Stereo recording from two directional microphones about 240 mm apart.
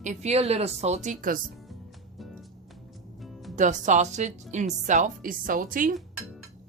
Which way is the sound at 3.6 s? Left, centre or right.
Right.